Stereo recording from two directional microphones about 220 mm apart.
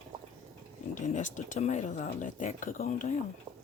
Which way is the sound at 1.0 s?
35° left (ahead or behind).